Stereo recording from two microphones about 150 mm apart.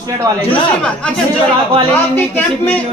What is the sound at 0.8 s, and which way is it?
A man's voice, 5° left (ahead or behind).